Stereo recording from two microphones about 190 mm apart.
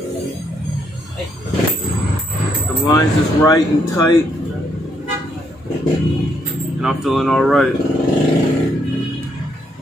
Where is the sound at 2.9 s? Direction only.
20° left (ahead or behind).